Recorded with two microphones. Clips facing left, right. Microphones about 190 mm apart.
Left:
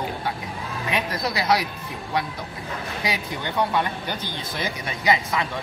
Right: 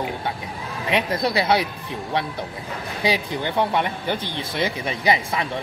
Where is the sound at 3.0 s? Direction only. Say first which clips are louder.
Right 7 dB; 30° right (ahead or behind).